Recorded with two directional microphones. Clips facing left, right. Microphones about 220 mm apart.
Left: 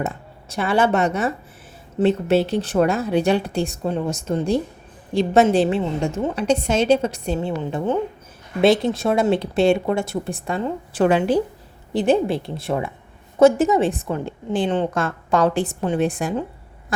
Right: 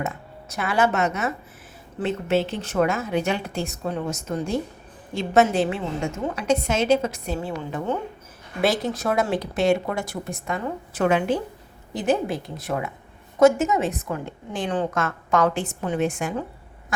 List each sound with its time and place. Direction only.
0.0 s a woman's voice: 30° left (ahead or behind)
8.6 s a woman's voice: 25° left (ahead or behind)